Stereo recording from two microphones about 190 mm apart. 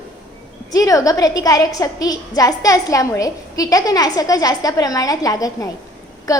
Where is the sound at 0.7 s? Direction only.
20° left (ahead or behind).